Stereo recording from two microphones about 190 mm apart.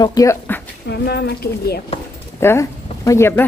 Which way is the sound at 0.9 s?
60° left (ahead or behind).